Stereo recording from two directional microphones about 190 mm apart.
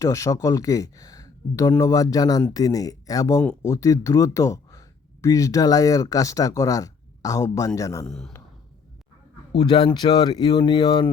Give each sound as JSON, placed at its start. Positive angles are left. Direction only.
{"t": 0.0, "sound": "speech", "side_deg": 15}
{"t": 8.0, "sound": "a man's voice", "side_deg": 5}
{"t": 9.6, "sound": "speech", "side_deg": 25}